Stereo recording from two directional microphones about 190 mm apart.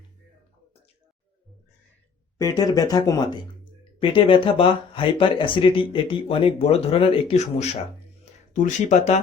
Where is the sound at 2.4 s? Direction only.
20° left (ahead or behind).